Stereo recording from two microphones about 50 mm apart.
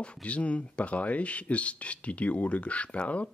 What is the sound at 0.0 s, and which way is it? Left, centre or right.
Speech, left.